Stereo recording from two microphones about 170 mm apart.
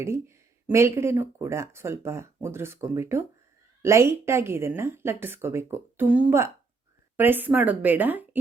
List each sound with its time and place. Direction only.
0.0 s a woman's voice: 15° right (ahead or behind)